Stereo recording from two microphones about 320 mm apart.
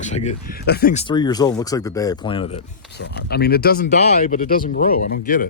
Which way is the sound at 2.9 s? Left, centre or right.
Left.